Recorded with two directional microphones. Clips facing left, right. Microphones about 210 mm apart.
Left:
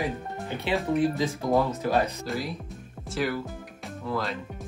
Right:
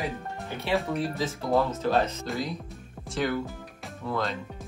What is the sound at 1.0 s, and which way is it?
Speech, 15° left (ahead or behind).